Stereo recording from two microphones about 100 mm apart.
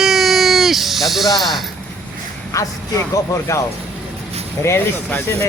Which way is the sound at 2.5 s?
35° left (ahead or behind).